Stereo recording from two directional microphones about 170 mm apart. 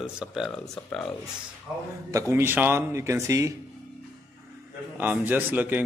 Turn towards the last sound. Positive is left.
turn(degrees=-10)  # may be behind; listen again after turning